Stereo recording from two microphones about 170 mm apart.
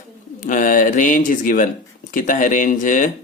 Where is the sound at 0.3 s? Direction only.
50° left (ahead or behind).